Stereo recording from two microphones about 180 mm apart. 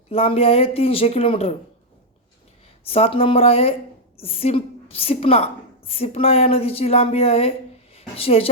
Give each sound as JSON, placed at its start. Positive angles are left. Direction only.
{"t": 0.1, "sound": "a woman's voice", "side_deg": 35}
{"t": 2.8, "sound": "a woman's voice", "side_deg": 30}